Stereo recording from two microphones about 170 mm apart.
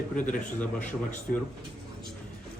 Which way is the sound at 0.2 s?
10° left (ahead or behind).